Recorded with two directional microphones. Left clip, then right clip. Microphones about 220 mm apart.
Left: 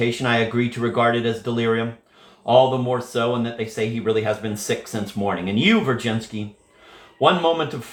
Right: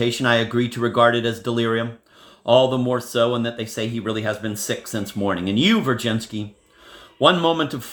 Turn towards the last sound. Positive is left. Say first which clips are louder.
# right 1 dB
turn(degrees=-50)  # may be behind; listen again after turning